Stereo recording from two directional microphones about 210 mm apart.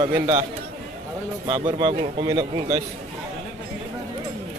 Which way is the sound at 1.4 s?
20° right (ahead or behind).